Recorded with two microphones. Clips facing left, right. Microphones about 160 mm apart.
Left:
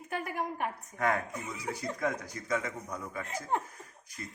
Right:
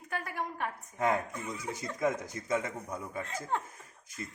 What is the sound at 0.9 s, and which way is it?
Speech, 20° right (ahead or behind).